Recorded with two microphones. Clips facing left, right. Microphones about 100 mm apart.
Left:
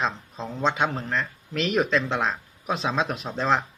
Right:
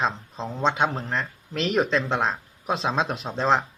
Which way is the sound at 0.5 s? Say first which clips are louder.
Right 1 dB; 25° right (ahead or behind).